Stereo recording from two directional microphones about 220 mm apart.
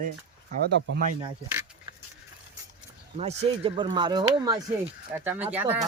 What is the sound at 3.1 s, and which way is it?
Speech, 30° right (ahead or behind).